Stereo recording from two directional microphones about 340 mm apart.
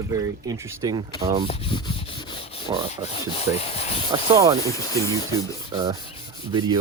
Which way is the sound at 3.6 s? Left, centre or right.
Centre.